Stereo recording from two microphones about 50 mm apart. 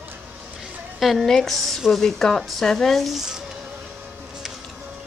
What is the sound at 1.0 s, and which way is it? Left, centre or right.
Speech, centre.